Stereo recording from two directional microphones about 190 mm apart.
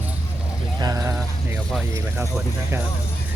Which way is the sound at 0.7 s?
20° right (ahead or behind).